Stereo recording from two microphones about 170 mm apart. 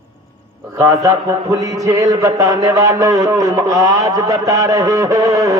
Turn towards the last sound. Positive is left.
turn(degrees=-20)  # may be behind; listen again after turning